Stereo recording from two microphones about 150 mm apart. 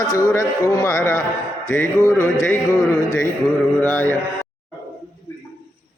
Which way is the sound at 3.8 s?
15° left (ahead or behind).